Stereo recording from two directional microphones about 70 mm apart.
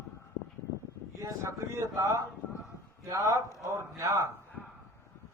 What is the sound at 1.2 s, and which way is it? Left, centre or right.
Speech, right.